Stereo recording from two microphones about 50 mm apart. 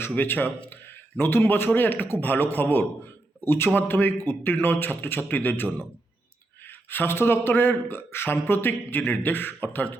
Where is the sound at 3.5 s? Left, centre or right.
Left.